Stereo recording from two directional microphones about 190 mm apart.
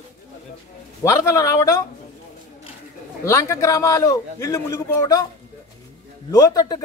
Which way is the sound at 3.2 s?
15° left (ahead or behind).